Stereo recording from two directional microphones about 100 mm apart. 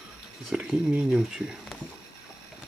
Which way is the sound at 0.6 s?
10° right (ahead or behind).